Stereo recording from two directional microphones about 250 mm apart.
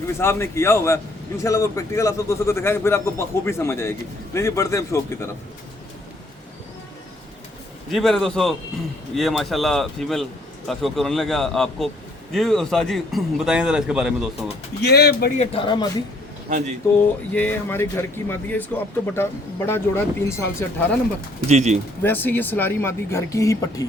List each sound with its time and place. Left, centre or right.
0.2 s speech: centre
7.9 s a man's voice: centre
14.8 s speech: left
15.4 s speech: left
16.5 s speech: right
17.3 s speech: centre
21.4 s speech: right
22.0 s speech: centre